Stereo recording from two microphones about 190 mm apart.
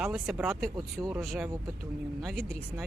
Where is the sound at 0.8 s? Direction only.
20° right (ahead or behind).